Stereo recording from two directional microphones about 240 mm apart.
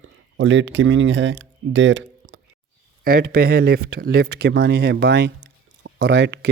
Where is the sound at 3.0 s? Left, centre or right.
Right.